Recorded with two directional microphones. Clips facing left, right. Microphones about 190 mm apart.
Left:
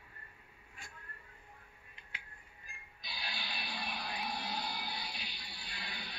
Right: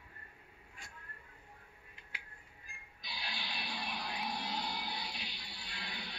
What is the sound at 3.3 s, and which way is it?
Music, 20° right (ahead or behind).